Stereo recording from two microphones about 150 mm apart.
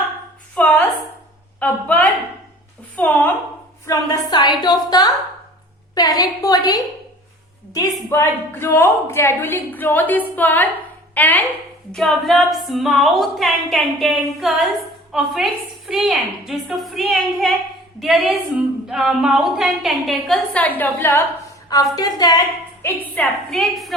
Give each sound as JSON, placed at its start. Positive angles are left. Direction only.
{"t": 0.5, "sound": "a sound", "side_deg": 10}
{"t": 3.8, "sound": "a woman's voice", "side_deg": 25}
{"t": 21.7, "sound": "a woman's voice", "side_deg": 25}
{"t": 22.8, "sound": "a woman's voice", "side_deg": 15}
{"t": 23.6, "sound": "speech", "side_deg": 0}